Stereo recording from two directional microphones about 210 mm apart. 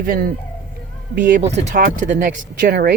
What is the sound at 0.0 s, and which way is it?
Speech, 45° right (ahead or behind).